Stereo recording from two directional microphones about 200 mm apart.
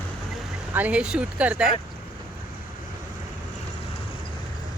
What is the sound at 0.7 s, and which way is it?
Speech, 10° right (ahead or behind).